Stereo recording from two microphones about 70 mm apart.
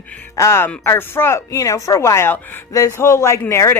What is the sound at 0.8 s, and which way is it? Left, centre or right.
Speech, left.